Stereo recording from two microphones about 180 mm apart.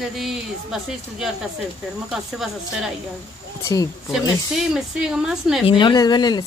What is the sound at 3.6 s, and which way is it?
Speech, 20° left (ahead or behind).